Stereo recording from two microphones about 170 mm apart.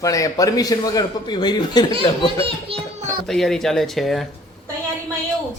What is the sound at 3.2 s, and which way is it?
Speech, centre (ahead or behind).